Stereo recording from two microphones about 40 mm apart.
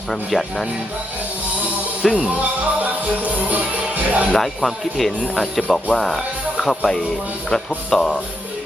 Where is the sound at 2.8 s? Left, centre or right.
Right.